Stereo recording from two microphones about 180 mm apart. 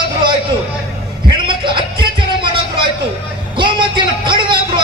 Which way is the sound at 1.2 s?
25° right (ahead or behind).